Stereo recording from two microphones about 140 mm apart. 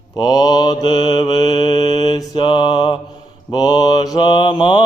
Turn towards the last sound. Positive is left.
turn(degrees=35)  # may be behind; listen again after turning